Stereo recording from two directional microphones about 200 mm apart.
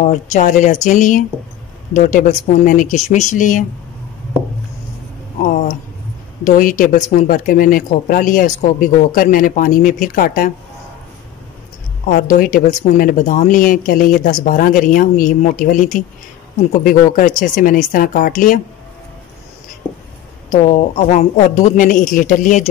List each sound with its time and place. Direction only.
0.0 s speech: 35° left (ahead or behind)
5.4 s speech: 40° left (ahead or behind)
12.1 s speech: 45° left (ahead or behind)
20.6 s speech: 40° left (ahead or behind)